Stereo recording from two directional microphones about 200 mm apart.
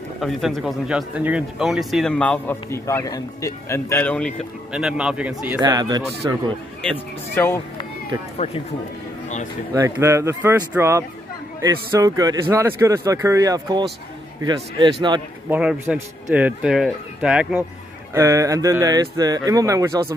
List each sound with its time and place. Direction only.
0.2 s speech: centre (ahead or behind)
5.6 s a man's voice: 20° right (ahead or behind)
6.8 s speech: 10° left (ahead or behind)
8.4 s speech: 30° left (ahead or behind)
9.8 s a man's voice: 15° right (ahead or behind)
15.5 s speech: 10° right (ahead or behind)